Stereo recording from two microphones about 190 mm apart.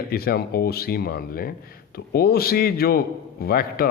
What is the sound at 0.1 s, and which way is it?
A man's voice, 55° left (ahead or behind).